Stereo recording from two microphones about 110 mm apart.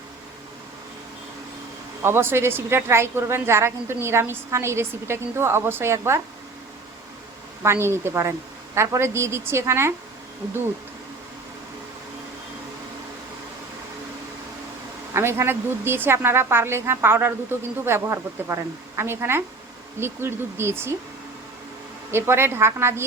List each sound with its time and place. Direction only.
2.0 s a woman's voice: 20° right (ahead or behind)
7.6 s a woman's voice: 25° right (ahead or behind)
15.1 s a woman's voice: 25° right (ahead or behind)
22.1 s a woman's voice: 20° right (ahead or behind)